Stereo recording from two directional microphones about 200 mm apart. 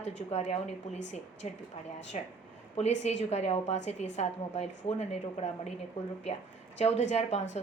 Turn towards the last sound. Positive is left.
turn(degrees=35)  # may be behind; listen again after turning